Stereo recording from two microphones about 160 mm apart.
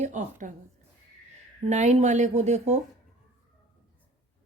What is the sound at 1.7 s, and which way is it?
A woman's voice, 45° right (ahead or behind).